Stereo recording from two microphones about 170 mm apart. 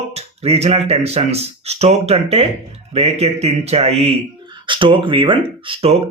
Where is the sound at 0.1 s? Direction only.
40° right (ahead or behind).